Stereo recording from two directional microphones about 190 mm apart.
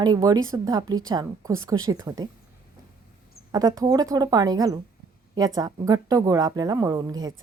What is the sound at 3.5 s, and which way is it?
A woman's voice, 20° right (ahead or behind).